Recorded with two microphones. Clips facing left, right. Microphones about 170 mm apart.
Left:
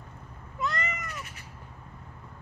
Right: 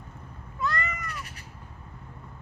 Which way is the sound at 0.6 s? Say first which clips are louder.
Right 1 dB; 20° left (ahead or behind).